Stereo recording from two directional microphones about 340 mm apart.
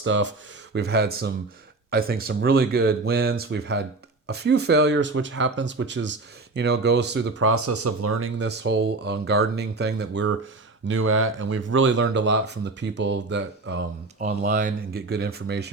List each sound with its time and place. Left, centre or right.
0.0 s speech: right
7.3 s speech: right